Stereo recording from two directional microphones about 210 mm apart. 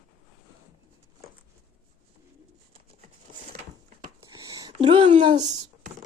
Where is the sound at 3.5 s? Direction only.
45° right (ahead or behind).